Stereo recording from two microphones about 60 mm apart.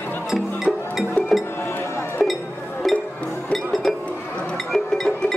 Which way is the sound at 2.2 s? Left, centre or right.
Centre.